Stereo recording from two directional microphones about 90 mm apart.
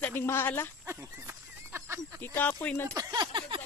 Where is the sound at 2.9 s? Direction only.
45° right (ahead or behind); by 3.6 s 65° right (ahead or behind).